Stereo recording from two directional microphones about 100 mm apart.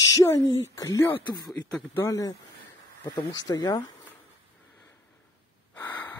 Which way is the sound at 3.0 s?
45° left (ahead or behind).